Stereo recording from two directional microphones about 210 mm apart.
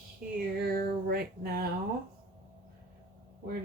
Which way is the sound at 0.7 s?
45° right (ahead or behind).